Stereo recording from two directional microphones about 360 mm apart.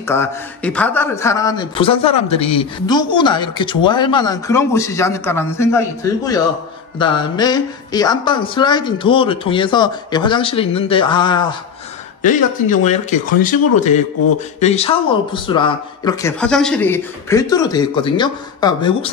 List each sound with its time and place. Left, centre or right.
0.1 s speech: centre